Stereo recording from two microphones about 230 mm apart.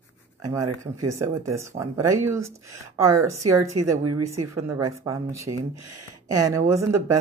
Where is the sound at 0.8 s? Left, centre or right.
Centre.